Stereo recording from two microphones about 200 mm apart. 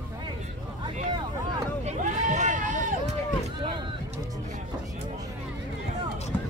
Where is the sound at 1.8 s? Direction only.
35° right (ahead or behind).